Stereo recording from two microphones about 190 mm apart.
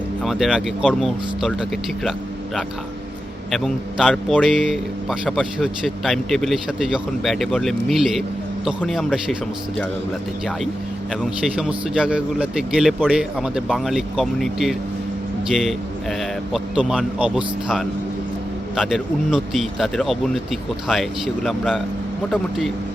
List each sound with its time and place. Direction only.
0.2 s a man's voice: centre (ahead or behind)
3.5 s a man's voice: centre (ahead or behind)
11.2 s a man's voice: centre (ahead or behind)